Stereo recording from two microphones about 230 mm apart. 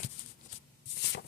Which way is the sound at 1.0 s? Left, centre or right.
Left.